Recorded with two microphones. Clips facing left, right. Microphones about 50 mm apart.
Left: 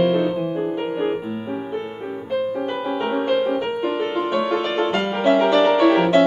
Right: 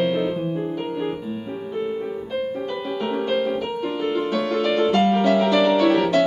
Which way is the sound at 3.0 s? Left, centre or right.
Left.